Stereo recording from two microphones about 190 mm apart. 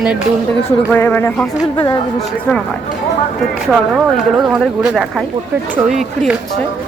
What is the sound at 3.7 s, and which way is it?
Speech, centre (ahead or behind).